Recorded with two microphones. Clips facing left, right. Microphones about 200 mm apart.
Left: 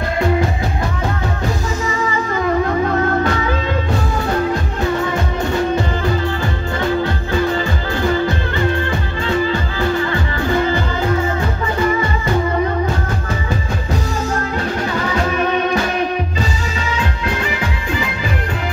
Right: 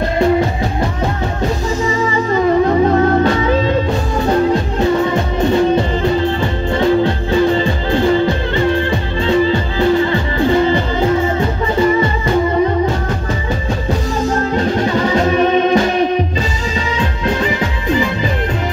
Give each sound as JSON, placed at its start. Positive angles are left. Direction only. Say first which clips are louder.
{"t": 2.3, "sound": "music", "louder": "right 6 dB", "side_deg": -25}
{"t": 6.8, "sound": "music", "louder": "right 6 dB", "side_deg": -25}
{"t": 9.2, "sound": "music", "louder": "right 5 dB", "side_deg": -25}
{"t": 14.5, "sound": "music", "louder": "right 5 dB", "side_deg": -30}